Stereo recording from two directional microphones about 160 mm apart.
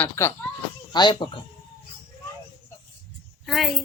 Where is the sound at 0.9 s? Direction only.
30° left (ahead or behind).